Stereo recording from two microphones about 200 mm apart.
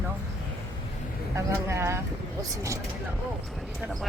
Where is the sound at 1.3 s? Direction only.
15° right (ahead or behind).